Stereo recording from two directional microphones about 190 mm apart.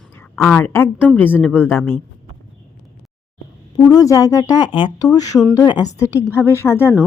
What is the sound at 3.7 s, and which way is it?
A woman's voice, 20° left (ahead or behind).